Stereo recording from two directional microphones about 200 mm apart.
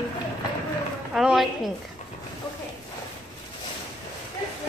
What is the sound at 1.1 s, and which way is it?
Speech, centre (ahead or behind).